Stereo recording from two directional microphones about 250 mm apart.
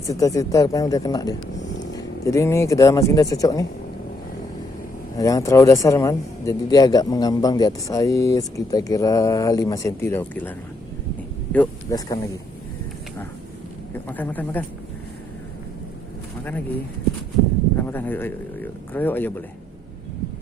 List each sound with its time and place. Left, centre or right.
0.1 s speech: centre
5.1 s speech: centre
11.5 s speech: centre
13.9 s speech: centre
16.4 s speech: centre
17.7 s speech: centre